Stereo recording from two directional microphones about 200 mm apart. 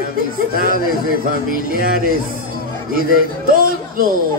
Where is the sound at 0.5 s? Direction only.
45° right (ahead or behind).